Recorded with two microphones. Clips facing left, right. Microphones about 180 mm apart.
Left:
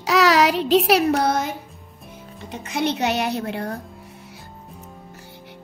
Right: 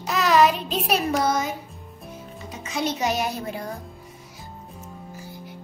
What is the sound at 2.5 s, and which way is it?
A child's voice, 60° left (ahead or behind).